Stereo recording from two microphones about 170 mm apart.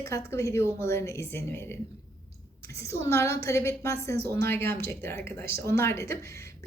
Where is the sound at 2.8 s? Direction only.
15° left (ahead or behind).